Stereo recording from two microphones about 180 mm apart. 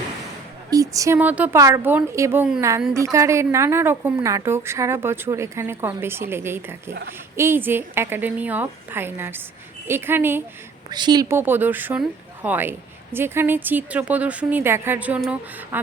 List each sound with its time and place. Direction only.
0.7 s speech: 20° right (ahead or behind)
10.8 s speech: 25° right (ahead or behind); by 15.8 s 10° right (ahead or behind)